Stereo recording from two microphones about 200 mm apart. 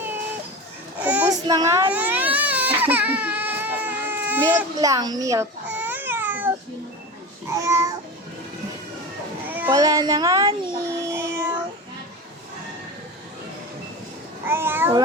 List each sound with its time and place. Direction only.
0.9 s child singing: 5° right (ahead or behind)
1.3 s baby cry: 20° right (ahead or behind)
4.4 s baby cry: 20° right (ahead or behind)
7.5 s babbling: 15° right (ahead or behind)
9.5 s a sound: 10° right (ahead or behind)
14.4 s a child's voice: 10° right (ahead or behind)